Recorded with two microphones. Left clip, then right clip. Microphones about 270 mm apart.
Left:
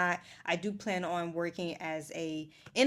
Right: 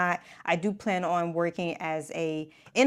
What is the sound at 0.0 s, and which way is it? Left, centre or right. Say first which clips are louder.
Speech: right 4 dB; right.